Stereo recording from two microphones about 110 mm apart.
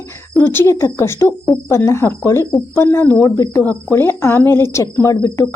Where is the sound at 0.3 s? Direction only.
20° left (ahead or behind).